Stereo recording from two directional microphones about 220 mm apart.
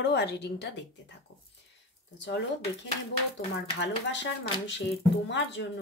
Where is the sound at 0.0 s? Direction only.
50° left (ahead or behind).